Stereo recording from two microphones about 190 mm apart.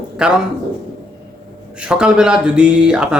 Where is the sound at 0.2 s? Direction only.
5° right (ahead or behind).